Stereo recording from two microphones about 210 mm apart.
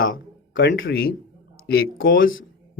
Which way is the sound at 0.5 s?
60° left (ahead or behind).